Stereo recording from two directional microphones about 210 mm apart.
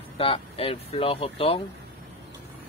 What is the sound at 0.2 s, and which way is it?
Speech, 25° left (ahead or behind).